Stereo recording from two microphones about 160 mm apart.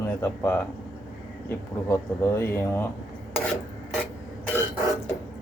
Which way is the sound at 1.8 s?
15° left (ahead or behind).